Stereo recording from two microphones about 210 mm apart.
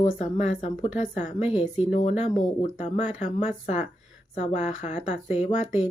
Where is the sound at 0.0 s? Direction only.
35° left (ahead or behind).